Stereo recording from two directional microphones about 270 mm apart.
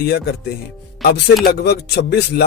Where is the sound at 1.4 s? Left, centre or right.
Left.